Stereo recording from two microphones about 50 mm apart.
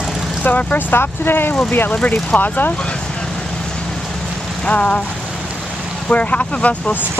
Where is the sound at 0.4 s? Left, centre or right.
Left.